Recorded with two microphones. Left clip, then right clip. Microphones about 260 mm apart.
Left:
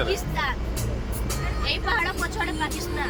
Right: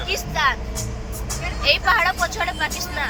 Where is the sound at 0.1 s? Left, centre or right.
Centre.